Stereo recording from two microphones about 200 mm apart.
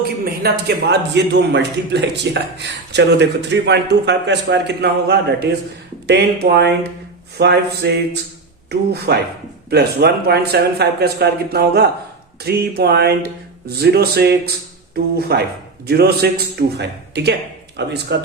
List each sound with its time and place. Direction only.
0.3 s a man's voice: 50° right (ahead or behind)